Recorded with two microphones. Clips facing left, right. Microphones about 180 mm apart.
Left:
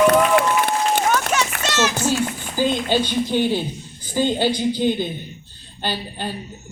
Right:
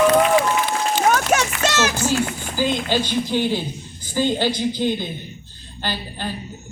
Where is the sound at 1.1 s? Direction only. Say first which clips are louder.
Right 2 dB; 50° right (ahead or behind).